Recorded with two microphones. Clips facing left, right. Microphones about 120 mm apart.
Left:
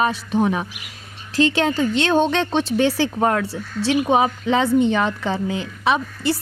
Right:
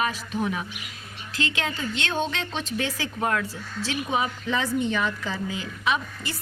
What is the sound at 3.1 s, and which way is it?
Speech, 40° left (ahead or behind).